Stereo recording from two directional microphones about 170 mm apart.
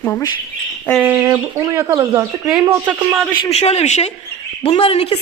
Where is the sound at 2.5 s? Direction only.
5° right (ahead or behind).